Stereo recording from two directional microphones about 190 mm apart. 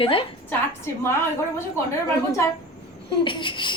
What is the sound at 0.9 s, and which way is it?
Speech, 15° left (ahead or behind).